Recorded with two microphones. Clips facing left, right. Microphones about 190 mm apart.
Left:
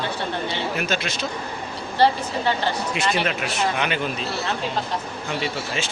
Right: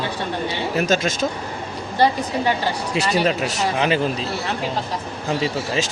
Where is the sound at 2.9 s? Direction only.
35° right (ahead or behind).